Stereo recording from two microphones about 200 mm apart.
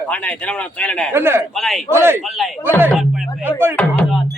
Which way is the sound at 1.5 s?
Centre (ahead or behind).